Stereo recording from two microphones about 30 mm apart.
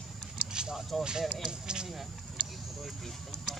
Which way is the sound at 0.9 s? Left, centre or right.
Centre.